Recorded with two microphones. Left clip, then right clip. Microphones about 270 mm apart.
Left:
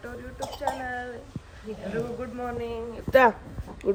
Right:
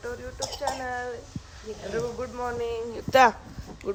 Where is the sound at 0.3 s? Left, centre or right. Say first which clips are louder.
Left 1 dB; right.